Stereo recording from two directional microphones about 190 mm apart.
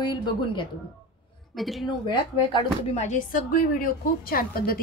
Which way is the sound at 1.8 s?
25° left (ahead or behind).